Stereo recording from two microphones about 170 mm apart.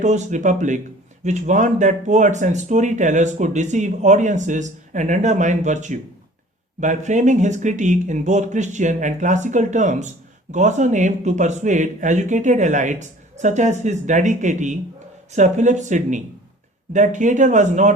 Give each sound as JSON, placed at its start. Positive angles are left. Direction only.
{"t": 0.0, "sound": "speech", "side_deg": -45}